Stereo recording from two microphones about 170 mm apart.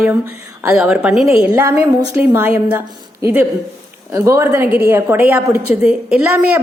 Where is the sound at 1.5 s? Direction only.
15° right (ahead or behind).